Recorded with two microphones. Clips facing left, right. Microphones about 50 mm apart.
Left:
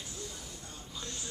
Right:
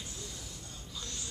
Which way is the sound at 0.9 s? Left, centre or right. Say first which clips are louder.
Left 1 dB; centre.